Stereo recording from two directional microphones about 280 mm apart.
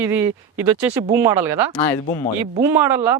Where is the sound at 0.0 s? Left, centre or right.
Centre.